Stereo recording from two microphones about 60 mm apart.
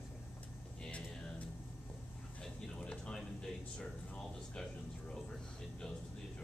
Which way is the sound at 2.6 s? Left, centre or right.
Centre.